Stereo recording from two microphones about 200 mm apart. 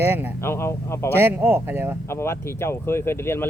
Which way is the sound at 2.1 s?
10° left (ahead or behind).